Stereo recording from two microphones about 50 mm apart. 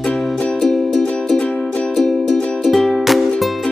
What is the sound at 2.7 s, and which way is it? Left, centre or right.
Music, centre.